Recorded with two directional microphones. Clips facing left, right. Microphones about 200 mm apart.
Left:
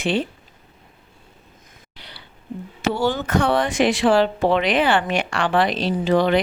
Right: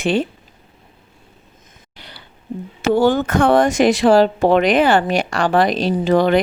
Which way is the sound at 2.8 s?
50° right (ahead or behind).